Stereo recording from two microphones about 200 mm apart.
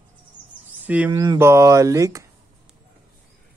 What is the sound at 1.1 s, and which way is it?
Speech, 20° right (ahead or behind).